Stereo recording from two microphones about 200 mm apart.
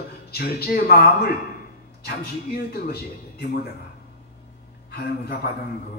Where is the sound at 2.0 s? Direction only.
50° left (ahead or behind).